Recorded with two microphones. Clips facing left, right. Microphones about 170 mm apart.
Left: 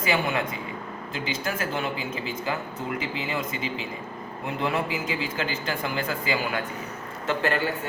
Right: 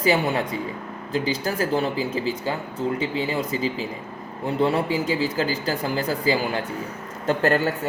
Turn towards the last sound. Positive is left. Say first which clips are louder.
# right 5 dB
turn(degrees=-40)  # may be behind; listen again after turning